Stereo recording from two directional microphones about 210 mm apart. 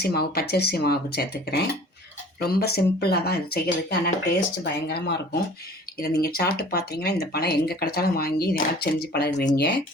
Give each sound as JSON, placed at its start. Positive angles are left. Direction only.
{"t": 0.0, "sound": "speech", "side_deg": 50}